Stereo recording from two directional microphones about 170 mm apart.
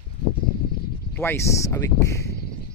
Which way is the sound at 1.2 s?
15° left (ahead or behind).